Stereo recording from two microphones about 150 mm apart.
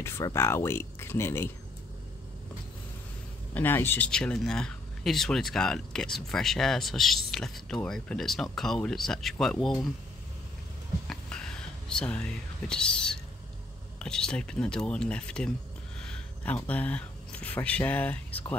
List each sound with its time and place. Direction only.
0.0 s speech: 20° left (ahead or behind)
3.5 s speech: 15° left (ahead or behind)
11.1 s a sound: 5° left (ahead or behind)
13.9 s speech: 5° left (ahead or behind)